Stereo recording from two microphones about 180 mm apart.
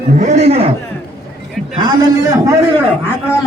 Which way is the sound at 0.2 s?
40° right (ahead or behind).